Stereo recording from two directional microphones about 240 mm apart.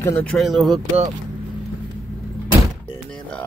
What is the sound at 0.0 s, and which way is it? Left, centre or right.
Speech, centre.